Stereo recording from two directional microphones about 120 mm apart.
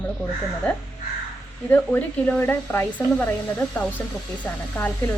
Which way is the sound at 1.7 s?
15° left (ahead or behind).